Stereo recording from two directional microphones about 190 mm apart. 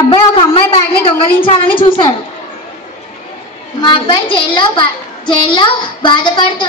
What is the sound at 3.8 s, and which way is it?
A child's voice, 25° left (ahead or behind).